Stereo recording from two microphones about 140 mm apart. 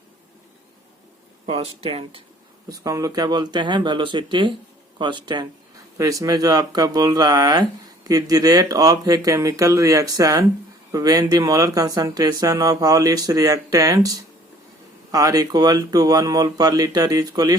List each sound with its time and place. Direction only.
1.5 s speech: 45° right (ahead or behind)
2.6 s speech: 25° right (ahead or behind)